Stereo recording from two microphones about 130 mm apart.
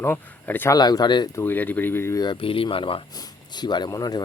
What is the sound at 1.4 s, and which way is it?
Speech, 15° left (ahead or behind).